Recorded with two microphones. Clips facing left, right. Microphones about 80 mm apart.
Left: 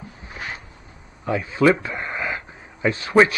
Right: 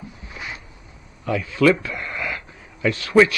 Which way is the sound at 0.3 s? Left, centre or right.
Left.